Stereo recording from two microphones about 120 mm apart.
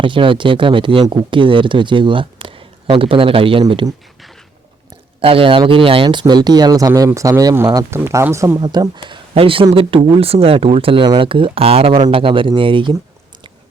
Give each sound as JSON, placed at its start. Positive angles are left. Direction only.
{"t": 0.0, "sound": "speech", "side_deg": -45}
{"t": 5.2, "sound": "speech", "side_deg": -50}